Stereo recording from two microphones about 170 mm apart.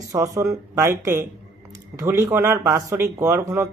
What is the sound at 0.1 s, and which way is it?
Speech, 20° right (ahead or behind).